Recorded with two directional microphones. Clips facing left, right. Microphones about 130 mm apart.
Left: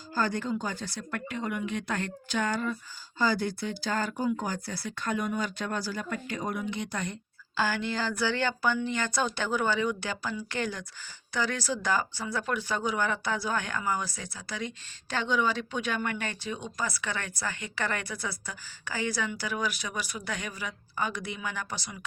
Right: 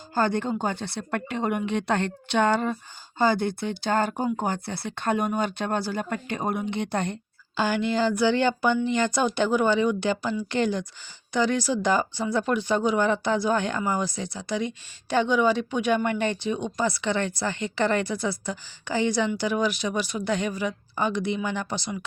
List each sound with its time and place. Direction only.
0.1 s speech: 55° right (ahead or behind)
2.0 s speech: 70° right (ahead or behind)
3.2 s speech: 55° right (ahead or behind)
7.5 s a woman's voice: 20° right (ahead or behind)